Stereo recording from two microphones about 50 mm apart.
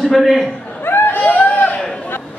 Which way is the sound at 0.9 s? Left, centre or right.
Left.